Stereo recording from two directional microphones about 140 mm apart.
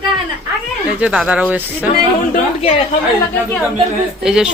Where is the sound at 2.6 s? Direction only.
45° left (ahead or behind).